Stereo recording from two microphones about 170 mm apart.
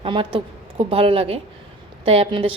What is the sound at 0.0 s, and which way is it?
A woman's voice, 30° right (ahead or behind).